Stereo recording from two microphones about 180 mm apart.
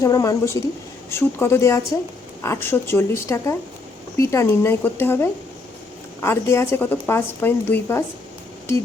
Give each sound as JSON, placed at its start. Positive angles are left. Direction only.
{"t": 0.0, "sound": "a woman's voice", "side_deg": 15}